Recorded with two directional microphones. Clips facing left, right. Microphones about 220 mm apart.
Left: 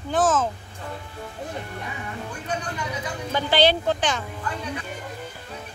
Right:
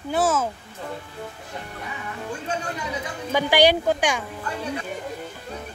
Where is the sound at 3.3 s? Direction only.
15° right (ahead or behind).